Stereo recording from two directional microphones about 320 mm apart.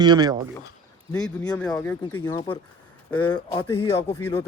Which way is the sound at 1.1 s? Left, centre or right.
Centre.